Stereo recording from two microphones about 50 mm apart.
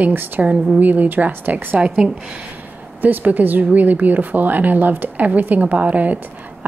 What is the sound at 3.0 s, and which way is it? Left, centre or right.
A woman's voice, right.